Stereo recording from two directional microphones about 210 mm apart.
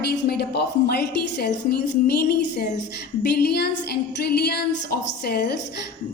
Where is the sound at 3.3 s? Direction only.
50° left (ahead or behind).